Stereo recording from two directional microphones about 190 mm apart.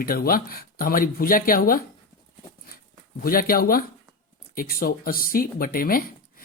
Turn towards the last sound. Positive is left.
turn(degrees=50)  # may be behind; listen again after turning